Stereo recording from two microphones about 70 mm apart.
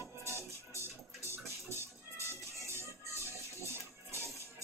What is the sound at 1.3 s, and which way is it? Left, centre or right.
Music, right.